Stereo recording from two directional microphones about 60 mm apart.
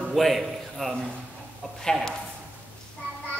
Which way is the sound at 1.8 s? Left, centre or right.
Centre.